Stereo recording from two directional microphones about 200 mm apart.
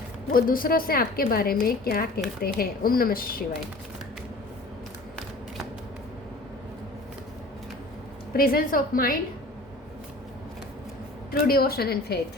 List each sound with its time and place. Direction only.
0.3 s a woman's voice: 45° left (ahead or behind)
8.3 s a woman's voice: 50° left (ahead or behind)
11.3 s a woman's voice: 50° left (ahead or behind)